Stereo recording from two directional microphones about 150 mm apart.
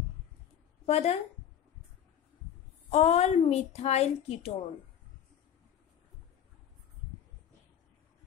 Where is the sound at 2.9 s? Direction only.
45° left (ahead or behind).